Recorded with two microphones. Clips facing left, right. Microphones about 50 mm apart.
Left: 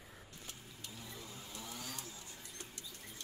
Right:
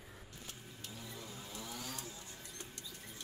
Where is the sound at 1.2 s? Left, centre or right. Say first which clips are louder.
Right 2 dB; centre.